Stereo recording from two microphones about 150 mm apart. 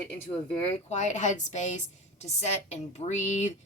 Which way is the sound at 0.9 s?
55° left (ahead or behind).